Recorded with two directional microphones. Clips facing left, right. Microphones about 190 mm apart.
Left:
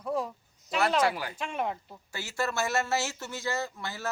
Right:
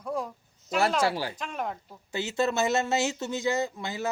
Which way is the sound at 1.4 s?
5° left (ahead or behind).